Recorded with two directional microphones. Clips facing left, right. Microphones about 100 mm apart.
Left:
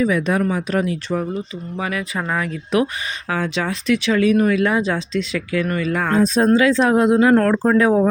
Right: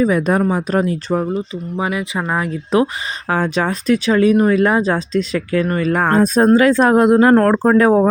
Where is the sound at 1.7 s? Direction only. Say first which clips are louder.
Right 3 dB; 20° right (ahead or behind).